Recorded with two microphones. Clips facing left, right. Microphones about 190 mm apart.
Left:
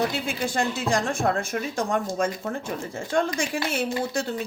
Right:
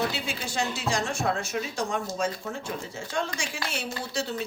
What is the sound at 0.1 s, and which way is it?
Speech, 55° left (ahead or behind).